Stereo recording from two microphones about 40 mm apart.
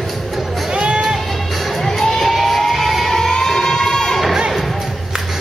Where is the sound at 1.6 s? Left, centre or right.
Centre.